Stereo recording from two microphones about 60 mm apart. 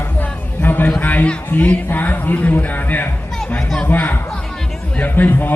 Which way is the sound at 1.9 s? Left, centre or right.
Left.